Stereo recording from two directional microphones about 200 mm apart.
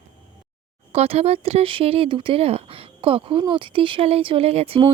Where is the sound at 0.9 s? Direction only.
30° right (ahead or behind).